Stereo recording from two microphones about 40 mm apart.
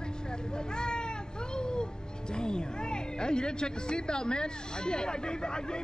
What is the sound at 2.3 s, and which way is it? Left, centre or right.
Speech, left.